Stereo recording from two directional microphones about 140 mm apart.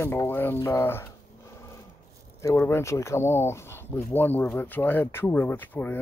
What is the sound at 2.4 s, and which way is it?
Speech, 20° left (ahead or behind).